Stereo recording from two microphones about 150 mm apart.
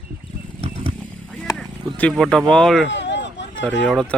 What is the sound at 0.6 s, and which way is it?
Vehicle, 45° right (ahead or behind).